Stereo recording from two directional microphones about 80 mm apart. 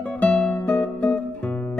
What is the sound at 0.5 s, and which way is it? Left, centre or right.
Music, left.